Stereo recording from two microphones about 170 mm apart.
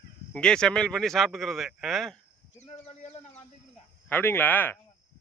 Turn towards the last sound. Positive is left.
turn(degrees=10)  # may be behind; listen again after turning